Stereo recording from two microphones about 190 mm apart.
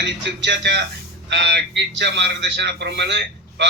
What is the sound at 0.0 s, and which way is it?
A man's voice, 65° right (ahead or behind).